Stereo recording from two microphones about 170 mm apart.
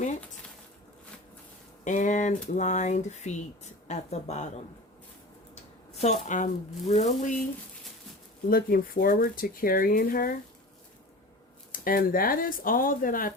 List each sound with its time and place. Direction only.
1.8 s speech: 45° left (ahead or behind)
6.0 s speech: 45° left (ahead or behind)
8.4 s speech: 60° left (ahead or behind)
11.7 s speech: 55° left (ahead or behind)